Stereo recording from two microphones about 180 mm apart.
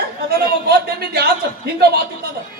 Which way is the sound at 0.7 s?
65° right (ahead or behind).